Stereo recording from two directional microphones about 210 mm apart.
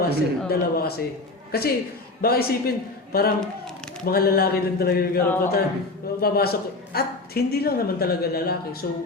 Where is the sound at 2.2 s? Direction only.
45° left (ahead or behind).